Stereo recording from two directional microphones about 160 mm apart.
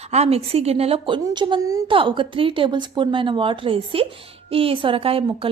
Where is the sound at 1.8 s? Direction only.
30° right (ahead or behind).